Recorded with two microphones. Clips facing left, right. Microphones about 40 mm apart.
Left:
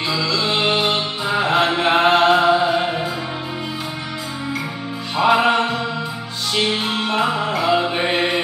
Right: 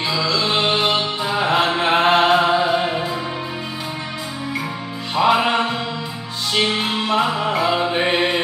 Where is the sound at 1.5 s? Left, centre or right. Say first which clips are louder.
Left 1 dB; right.